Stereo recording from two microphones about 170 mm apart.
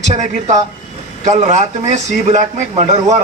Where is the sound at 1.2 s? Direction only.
45° right (ahead or behind).